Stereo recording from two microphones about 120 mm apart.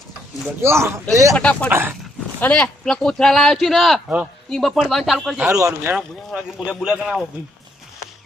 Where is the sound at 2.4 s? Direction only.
15° left (ahead or behind).